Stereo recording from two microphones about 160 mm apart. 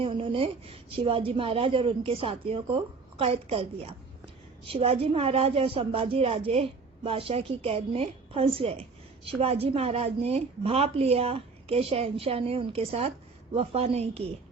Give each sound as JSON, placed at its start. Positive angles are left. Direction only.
{"t": 0.0, "sound": "speech", "side_deg": -35}